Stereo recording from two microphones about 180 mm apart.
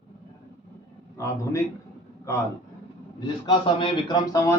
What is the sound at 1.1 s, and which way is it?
Speech, 15° left (ahead or behind).